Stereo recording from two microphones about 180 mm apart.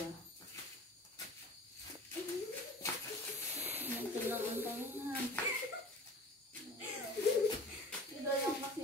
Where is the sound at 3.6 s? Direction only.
10° right (ahead or behind).